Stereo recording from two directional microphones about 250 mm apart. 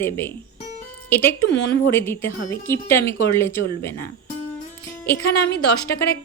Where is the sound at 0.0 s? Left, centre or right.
Centre.